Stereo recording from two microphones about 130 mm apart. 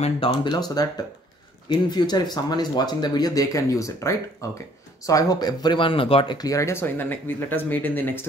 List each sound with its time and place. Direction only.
0.0 s speech: 40° left (ahead or behind)
6.3 s speech: 25° left (ahead or behind)